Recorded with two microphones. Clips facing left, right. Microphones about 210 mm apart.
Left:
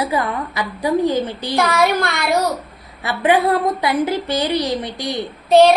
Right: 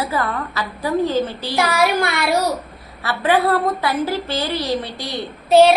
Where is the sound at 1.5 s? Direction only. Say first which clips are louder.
Left 2 dB; 10° right (ahead or behind).